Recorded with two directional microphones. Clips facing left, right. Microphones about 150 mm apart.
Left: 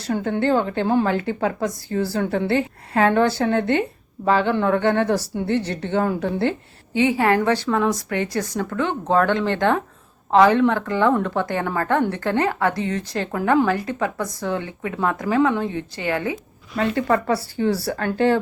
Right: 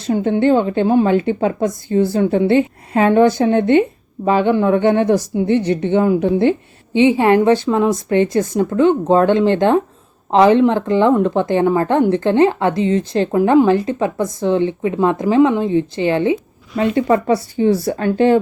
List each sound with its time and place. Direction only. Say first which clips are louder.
0.0 s a woman's voice: right 6 dB; 20° right (ahead or behind)